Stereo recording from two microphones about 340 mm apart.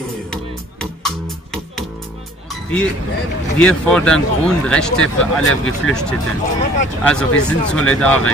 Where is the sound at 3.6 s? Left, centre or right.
Centre.